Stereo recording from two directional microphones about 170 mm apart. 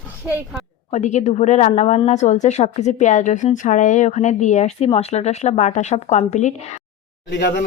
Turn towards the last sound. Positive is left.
turn(degrees=75)  # may be behind; listen again after turning